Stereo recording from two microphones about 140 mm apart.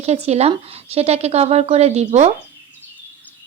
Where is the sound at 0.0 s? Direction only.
50° right (ahead or behind).